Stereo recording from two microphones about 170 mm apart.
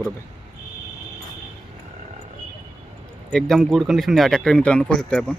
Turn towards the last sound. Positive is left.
turn(degrees=5)  # may be behind; listen again after turning